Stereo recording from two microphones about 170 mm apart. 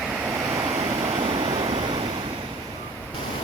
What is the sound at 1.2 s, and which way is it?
Waves, 35° right (ahead or behind).